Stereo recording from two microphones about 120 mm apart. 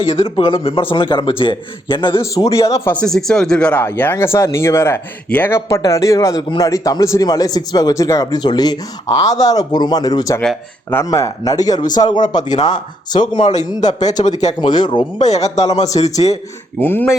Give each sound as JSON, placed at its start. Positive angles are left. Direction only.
{"t": 0.3, "sound": "a man's voice", "side_deg": 45}
{"t": 2.3, "sound": "a man's voice", "side_deg": 25}
{"t": 2.9, "sound": "a man's voice", "side_deg": 5}
{"t": 14.2, "sound": "speech", "side_deg": 90}
{"t": 15.2, "sound": "speech", "side_deg": 70}
{"t": 16.8, "sound": "speech", "side_deg": 15}